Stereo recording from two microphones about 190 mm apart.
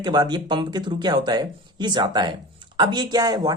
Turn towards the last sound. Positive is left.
turn(degrees=-20)  # may be behind; listen again after turning